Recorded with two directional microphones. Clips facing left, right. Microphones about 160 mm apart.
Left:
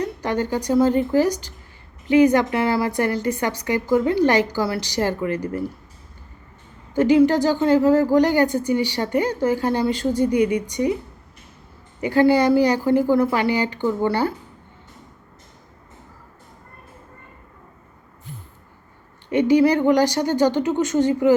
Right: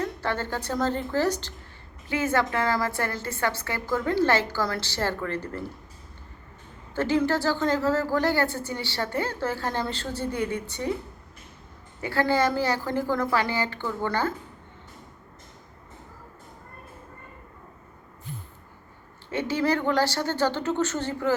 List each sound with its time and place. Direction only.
0.0 s a woman's voice: 15° left (ahead or behind)
6.9 s a woman's voice: 15° left (ahead or behind)
11.9 s a woman's voice: 15° left (ahead or behind)
19.3 s a woman's voice: 15° left (ahead or behind)